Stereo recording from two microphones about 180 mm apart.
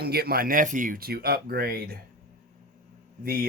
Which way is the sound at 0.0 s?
60° right (ahead or behind).